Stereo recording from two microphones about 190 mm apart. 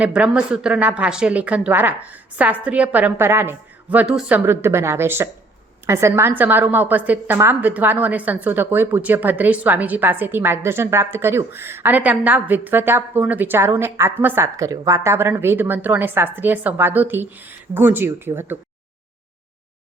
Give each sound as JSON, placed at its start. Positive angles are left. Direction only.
{"t": 0.0, "sound": "a woman's voice", "side_deg": -5}